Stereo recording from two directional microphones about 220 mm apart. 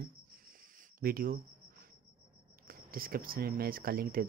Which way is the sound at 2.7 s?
40° right (ahead or behind).